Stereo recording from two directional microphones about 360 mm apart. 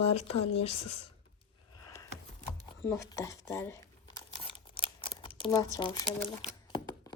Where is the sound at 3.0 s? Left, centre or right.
Centre.